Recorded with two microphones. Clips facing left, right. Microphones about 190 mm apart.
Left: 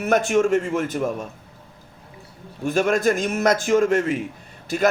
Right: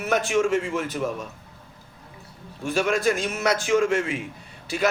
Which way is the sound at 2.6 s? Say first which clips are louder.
Left 3 dB; 45° left (ahead or behind).